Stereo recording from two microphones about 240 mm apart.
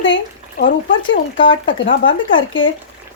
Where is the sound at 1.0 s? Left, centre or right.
Left.